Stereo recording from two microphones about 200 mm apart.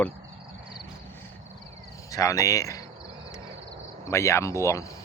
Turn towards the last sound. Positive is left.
turn(degrees=15)  # may be behind; listen again after turning